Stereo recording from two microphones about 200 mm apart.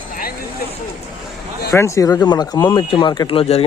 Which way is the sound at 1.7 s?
15° left (ahead or behind).